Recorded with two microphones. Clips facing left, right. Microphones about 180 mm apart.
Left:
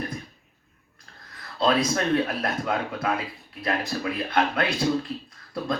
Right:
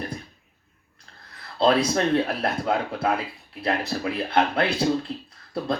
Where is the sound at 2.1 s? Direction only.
30° right (ahead or behind).